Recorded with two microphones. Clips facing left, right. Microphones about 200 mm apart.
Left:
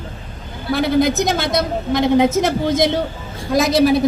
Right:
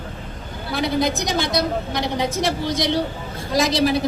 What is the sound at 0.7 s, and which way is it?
A woman's voice, 55° left (ahead or behind).